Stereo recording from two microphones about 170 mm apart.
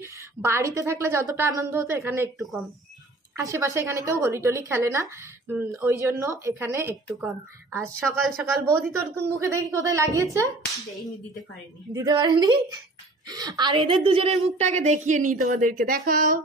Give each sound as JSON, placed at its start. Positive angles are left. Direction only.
{"t": 0.0, "sound": "speech", "side_deg": -15}
{"t": 2.3, "sound": "speech", "side_deg": 0}
{"t": 3.3, "sound": "speech", "side_deg": -15}
{"t": 8.0, "sound": "speech", "side_deg": 0}
{"t": 9.1, "sound": "speech", "side_deg": -15}
{"t": 11.9, "sound": "a woman's voice", "side_deg": -20}